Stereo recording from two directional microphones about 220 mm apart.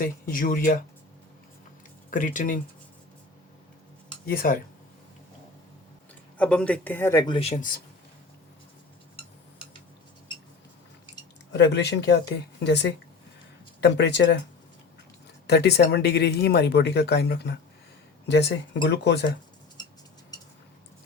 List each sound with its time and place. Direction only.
0.0 s speech: 40° left (ahead or behind)
2.0 s speech: 35° left (ahead or behind)
4.3 s speech: 40° left (ahead or behind)
6.3 s speech: 5° left (ahead or behind)
7.3 s speech: 30° left (ahead or behind)
11.5 s speech: 50° left (ahead or behind)
15.4 s speech: 50° left (ahead or behind)
19.8 s a sound: 20° left (ahead or behind)
20.3 s cutlery: 15° left (ahead or behind)